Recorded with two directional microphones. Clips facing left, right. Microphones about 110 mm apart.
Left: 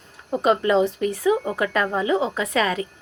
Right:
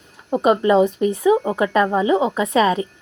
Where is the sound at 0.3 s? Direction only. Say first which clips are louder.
Right 4 dB; 20° right (ahead or behind).